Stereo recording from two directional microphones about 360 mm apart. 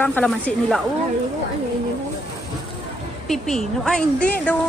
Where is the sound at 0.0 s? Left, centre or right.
Centre.